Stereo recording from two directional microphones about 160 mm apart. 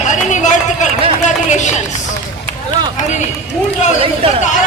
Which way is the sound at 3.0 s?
50° left (ahead or behind).